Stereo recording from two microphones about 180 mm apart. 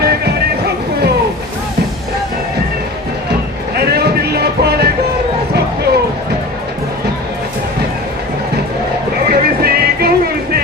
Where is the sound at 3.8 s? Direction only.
60° right (ahead or behind).